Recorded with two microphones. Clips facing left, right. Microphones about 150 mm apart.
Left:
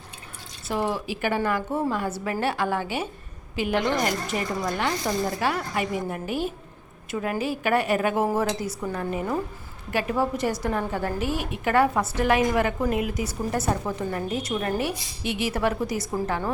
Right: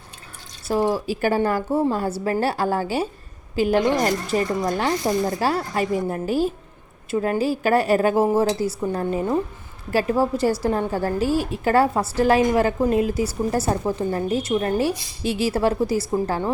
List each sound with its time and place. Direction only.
0.7 s speech: 35° right (ahead or behind)